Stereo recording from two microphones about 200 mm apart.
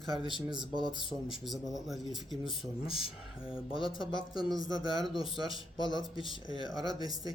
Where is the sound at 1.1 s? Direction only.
Centre (ahead or behind).